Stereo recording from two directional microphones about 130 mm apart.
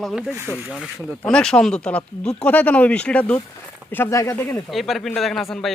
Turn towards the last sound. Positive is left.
turn(degrees=0)  # may be behind; listen again after turning